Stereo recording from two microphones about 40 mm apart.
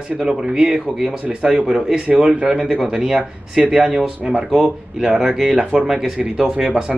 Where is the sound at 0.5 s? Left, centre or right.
Right.